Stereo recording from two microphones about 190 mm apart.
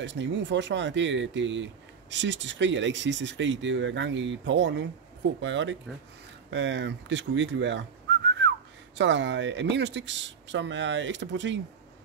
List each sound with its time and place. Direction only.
0.0 s speech: 70° right (ahead or behind)
8.9 s speech: 75° right (ahead or behind)